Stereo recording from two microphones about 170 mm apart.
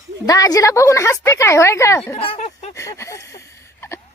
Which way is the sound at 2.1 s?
35° left (ahead or behind).